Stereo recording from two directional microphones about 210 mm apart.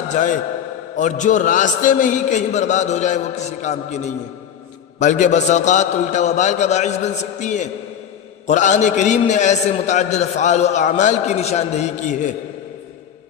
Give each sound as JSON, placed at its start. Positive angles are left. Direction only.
{"t": 0.1, "sound": "a man's voice", "side_deg": 35}